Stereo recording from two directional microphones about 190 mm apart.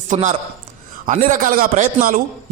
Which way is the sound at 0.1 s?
40° right (ahead or behind).